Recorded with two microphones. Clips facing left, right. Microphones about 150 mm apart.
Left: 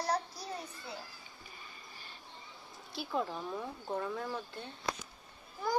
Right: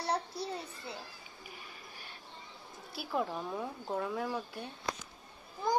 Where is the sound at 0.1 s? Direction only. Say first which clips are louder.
Right 4 dB; 25° right (ahead or behind).